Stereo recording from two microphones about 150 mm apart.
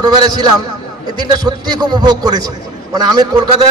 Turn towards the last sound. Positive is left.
turn(degrees=-25)  # may be behind; listen again after turning